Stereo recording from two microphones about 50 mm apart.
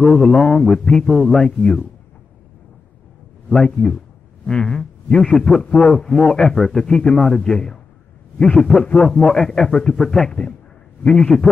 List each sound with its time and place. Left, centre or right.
0.0 s a man's voice: centre
1.6 s speech: centre
3.4 s a man's voice: centre
5.6 s a man's voice: centre
6.9 s a man's voice: centre
7.2 s a man's voice: centre